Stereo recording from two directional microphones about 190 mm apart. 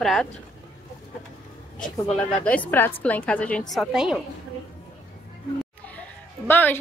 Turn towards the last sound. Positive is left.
turn(degrees=10)  # may be behind; listen again after turning